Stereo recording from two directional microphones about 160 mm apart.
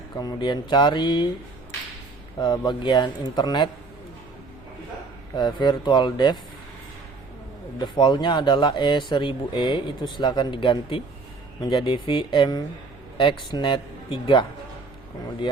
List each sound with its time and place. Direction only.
0.2 s speech: 25° left (ahead or behind)
2.4 s speech: 25° left (ahead or behind)
5.4 s speech: 30° left (ahead or behind)
7.8 s speech: 30° left (ahead or behind)